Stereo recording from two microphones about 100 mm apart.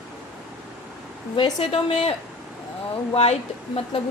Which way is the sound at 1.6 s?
80° left.